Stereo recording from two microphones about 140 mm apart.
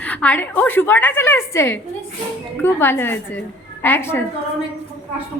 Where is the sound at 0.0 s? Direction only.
10° left (ahead or behind).